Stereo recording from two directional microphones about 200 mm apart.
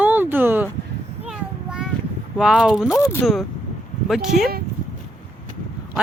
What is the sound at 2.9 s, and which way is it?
Speech, 15° left (ahead or behind).